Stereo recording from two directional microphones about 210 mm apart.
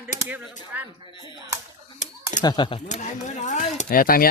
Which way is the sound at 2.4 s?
20° left (ahead or behind).